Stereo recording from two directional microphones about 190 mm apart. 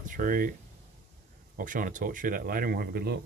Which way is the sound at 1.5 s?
45° right (ahead or behind).